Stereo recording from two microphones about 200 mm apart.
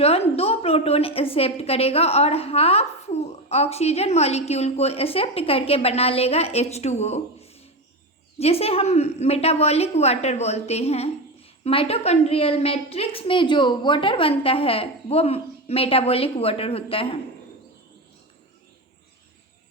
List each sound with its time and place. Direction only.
0.0 s a woman's voice: 30° left (ahead or behind)